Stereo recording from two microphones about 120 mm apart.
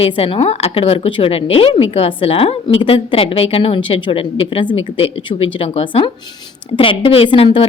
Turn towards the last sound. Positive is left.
turn(degrees=50)  # may be behind; listen again after turning